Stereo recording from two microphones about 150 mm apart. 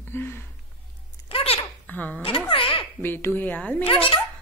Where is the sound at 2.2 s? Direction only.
35° left (ahead or behind).